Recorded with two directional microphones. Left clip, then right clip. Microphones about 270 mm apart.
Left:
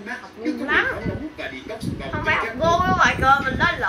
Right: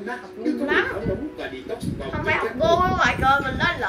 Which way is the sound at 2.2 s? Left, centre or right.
Centre.